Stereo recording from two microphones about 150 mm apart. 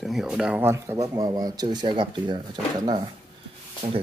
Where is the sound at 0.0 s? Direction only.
Centre (ahead or behind); by 3.0 s 30° right (ahead or behind).